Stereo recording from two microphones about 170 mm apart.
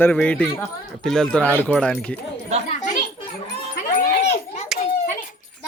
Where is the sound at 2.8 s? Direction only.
50° left (ahead or behind).